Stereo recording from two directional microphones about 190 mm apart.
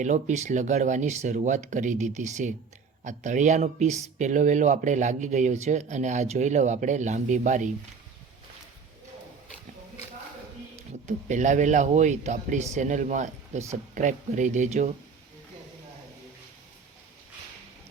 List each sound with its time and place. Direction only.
0.0 s speech: 40° right (ahead or behind)
11.0 s speech: 40° right (ahead or behind)